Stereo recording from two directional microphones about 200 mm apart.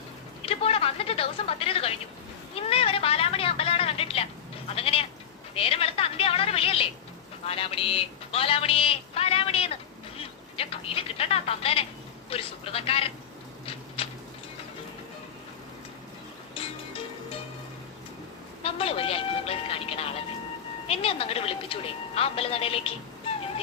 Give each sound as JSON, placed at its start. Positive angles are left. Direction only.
{"t": 0.4, "sound": "a sound", "side_deg": 30}
{"t": 4.7, "sound": "speech", "side_deg": 30}
{"t": 13.7, "sound": "a sound", "side_deg": 30}
{"t": 16.6, "sound": "music", "side_deg": 25}
{"t": 18.6, "sound": "music", "side_deg": 30}
{"t": 20.8, "sound": "speech", "side_deg": 30}